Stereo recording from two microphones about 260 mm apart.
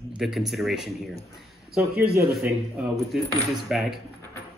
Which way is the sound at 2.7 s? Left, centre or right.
Centre.